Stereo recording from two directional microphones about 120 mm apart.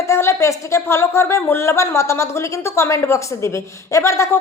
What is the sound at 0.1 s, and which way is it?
Speech, 25° left (ahead or behind).